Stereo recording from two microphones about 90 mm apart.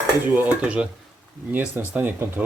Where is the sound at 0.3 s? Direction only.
15° right (ahead or behind).